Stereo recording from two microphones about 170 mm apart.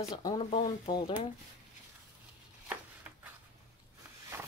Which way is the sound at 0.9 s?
30° left (ahead or behind).